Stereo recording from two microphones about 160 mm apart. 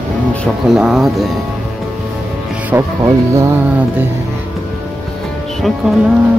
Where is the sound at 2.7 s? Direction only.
20° right (ahead or behind).